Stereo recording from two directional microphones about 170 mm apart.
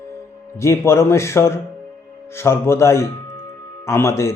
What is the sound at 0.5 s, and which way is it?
Music, 15° left (ahead or behind).